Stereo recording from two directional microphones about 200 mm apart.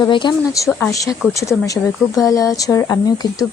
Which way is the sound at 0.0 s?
20° left (ahead or behind).